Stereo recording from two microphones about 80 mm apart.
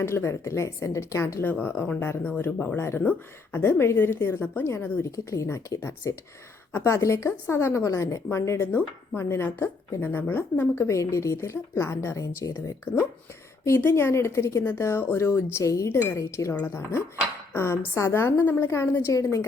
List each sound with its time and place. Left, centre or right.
0.0 s speech: left